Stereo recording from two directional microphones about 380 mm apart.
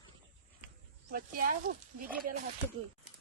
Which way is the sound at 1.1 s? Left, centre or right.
Right.